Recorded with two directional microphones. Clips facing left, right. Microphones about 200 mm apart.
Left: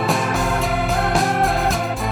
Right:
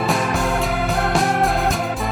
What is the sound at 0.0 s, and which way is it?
Music, centre (ahead or behind).